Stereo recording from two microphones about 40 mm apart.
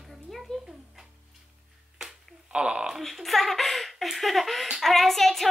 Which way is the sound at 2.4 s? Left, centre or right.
Right.